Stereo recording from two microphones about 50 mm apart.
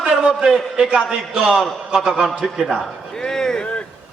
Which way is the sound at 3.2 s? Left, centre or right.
Centre.